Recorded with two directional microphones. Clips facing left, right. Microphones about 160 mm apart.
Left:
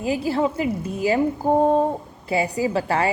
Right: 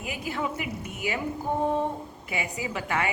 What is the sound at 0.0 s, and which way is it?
A woman's voice, 30° left (ahead or behind).